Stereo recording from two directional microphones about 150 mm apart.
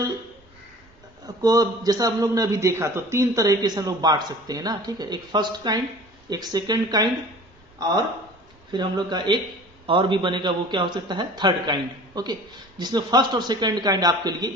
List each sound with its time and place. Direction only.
1.2 s a man's voice: 25° right (ahead or behind)
8.7 s a man's voice: 30° right (ahead or behind)